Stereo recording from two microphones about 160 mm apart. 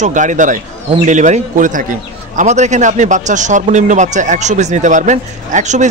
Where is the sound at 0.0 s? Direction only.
50° right (ahead or behind).